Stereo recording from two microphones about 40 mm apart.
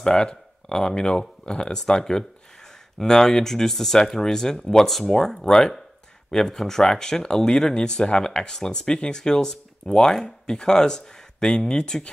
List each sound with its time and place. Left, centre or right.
0.0 s speech: centre